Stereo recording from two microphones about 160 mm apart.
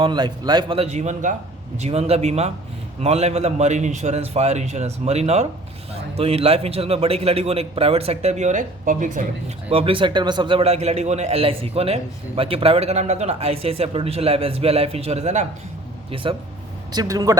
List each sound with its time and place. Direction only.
0.0 s a man's voice: 25° right (ahead or behind); by 9.2 s 55° right (ahead or behind)
9.6 s a man's voice: 40° right (ahead or behind)
16.9 s speech: 25° right (ahead or behind)